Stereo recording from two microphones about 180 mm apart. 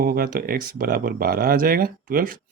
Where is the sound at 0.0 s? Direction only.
55° right (ahead or behind).